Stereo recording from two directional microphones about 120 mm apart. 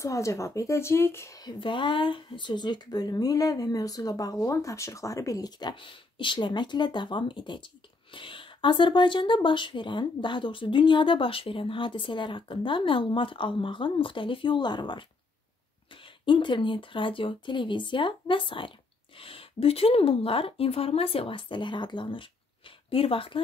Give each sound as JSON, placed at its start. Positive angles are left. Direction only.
{"t": 0.0, "sound": "speech", "side_deg": 25}
{"t": 1.4, "sound": "speech", "side_deg": 40}
{"t": 16.3, "sound": "speech", "side_deg": 40}